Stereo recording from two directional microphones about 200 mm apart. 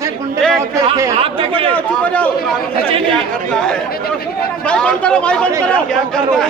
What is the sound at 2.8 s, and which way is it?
Speech, 25° right (ahead or behind).